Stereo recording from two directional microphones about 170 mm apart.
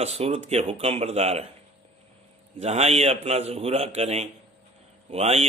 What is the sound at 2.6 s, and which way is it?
Speech, 40° right (ahead or behind).